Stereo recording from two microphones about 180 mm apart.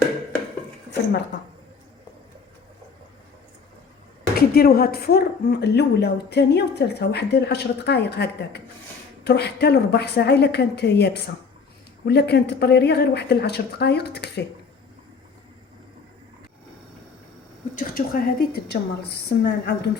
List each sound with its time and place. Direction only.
1.3 s speech: 80° left
4.4 s speech: 60° left (ahead or behind)
17.7 s speech: 50° left (ahead or behind)